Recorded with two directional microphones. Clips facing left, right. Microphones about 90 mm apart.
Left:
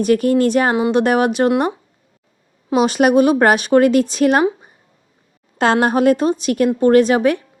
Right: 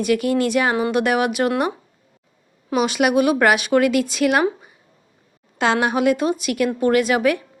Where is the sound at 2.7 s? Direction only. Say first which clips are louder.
Left 5 dB; 35° left (ahead or behind).